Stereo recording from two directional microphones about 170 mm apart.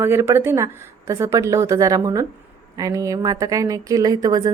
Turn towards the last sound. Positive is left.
turn(degrees=-20)  # may be behind; listen again after turning